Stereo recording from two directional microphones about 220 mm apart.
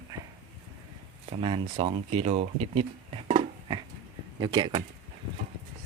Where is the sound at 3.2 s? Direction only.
20° right (ahead or behind).